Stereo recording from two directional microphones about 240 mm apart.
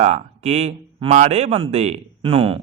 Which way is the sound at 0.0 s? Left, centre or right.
Right.